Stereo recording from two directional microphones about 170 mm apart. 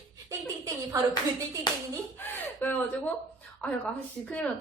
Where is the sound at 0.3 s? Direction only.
20° right (ahead or behind).